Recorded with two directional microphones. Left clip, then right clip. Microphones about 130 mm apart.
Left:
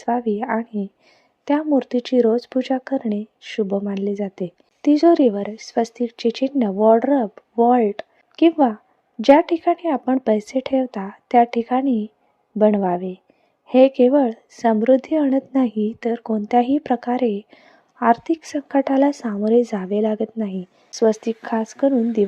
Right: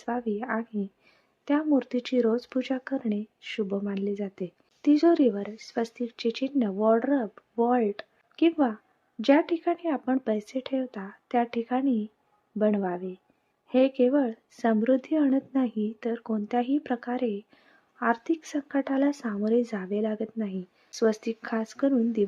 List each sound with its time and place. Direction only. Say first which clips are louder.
0.0 s speech: left 9 dB; 35° left (ahead or behind)